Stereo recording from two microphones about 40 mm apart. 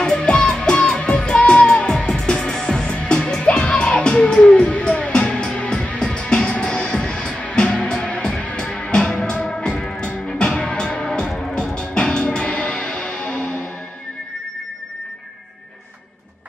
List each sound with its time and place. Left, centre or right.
0.0 s music: left